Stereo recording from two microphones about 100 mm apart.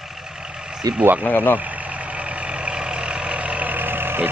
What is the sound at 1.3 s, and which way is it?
Speech, 20° left (ahead or behind).